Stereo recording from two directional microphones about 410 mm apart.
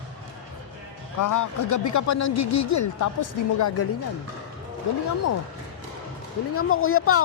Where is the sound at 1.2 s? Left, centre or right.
Left.